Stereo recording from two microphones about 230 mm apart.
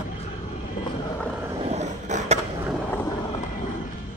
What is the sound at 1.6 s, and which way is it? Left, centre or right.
Vehicle, right.